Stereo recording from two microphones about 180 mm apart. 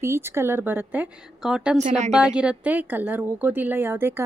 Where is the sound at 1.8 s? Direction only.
40° right (ahead or behind).